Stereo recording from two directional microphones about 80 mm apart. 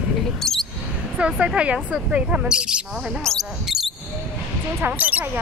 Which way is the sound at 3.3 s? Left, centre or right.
Centre.